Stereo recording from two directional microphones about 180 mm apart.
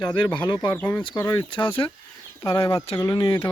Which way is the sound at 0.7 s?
10° left (ahead or behind).